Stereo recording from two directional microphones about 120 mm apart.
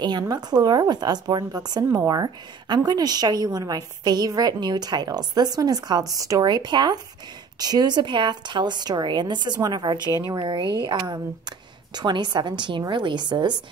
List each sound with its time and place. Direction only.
0.0 s a woman's voice: 35° right (ahead or behind)